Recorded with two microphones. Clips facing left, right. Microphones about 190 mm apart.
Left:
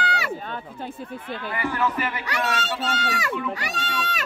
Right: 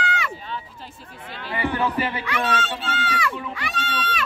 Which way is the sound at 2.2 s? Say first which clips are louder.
Right 2 dB; 40° left (ahead or behind).